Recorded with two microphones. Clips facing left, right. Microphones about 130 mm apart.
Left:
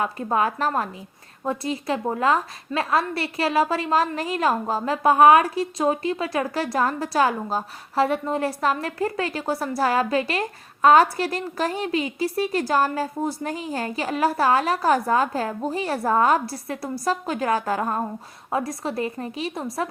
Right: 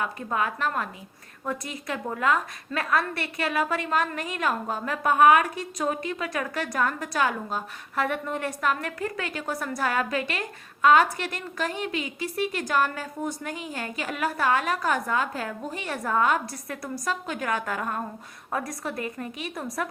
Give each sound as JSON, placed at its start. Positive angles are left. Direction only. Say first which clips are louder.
{"t": 0.0, "sound": "a woman's voice", "louder": "left 5 dB", "side_deg": 35}